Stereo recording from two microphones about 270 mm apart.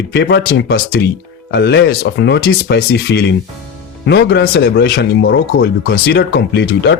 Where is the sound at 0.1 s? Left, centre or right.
Left.